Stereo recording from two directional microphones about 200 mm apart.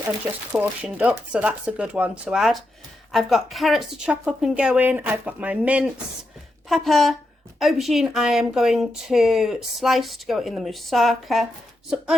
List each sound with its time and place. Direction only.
0.5 s speech: 5° right (ahead or behind)